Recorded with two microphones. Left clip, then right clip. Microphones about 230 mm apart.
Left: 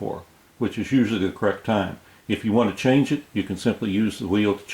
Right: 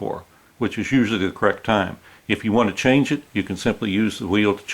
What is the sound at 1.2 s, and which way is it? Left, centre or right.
Speech, centre.